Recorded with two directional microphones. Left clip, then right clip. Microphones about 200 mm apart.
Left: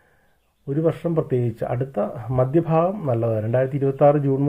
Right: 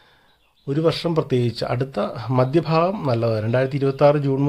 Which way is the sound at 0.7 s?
25° right (ahead or behind).